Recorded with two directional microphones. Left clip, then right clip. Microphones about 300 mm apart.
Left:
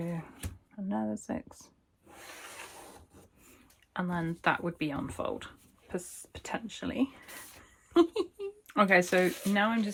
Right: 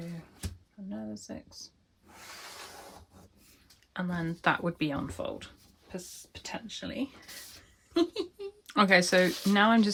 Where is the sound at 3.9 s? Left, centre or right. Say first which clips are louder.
Left 1 dB; centre.